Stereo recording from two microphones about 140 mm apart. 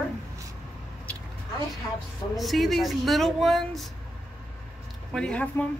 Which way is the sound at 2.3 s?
Centre (ahead or behind).